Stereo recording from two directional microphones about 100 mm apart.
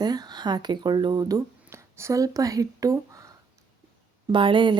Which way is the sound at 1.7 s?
30° right (ahead or behind).